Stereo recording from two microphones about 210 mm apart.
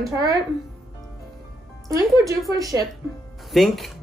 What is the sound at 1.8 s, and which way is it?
Speech, 15° right (ahead or behind).